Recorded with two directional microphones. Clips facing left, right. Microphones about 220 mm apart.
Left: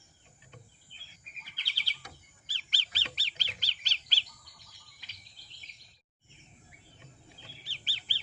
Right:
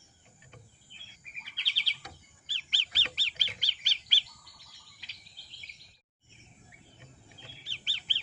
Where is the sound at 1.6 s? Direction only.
50° left (ahead or behind).